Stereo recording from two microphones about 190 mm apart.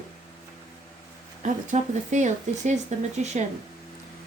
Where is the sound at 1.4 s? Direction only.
40° right (ahead or behind).